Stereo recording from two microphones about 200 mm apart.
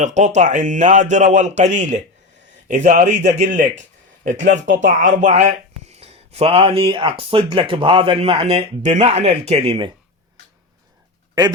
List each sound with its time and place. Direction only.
0.0 s speech: 35° right (ahead or behind)